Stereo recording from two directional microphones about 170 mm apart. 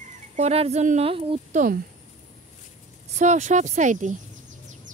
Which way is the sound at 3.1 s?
45° right (ahead or behind).